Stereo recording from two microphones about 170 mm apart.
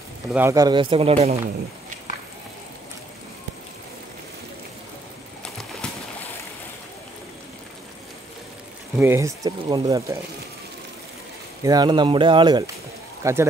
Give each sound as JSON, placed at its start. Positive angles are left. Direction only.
{"t": 0.3, "sound": "speech", "side_deg": -15}
{"t": 8.9, "sound": "speech", "side_deg": -15}
{"t": 11.6, "sound": "speech", "side_deg": -25}
{"t": 13.2, "sound": "speech", "side_deg": -15}